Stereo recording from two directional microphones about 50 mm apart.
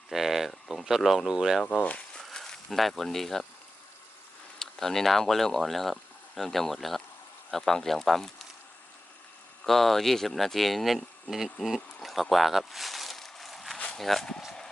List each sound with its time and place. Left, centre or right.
0.1 s speech: centre
1.7 s speech: left
2.1 s a sound: centre
4.6 s speech: centre
9.6 s speech: centre
11.9 s a sound: centre
13.9 s speech: centre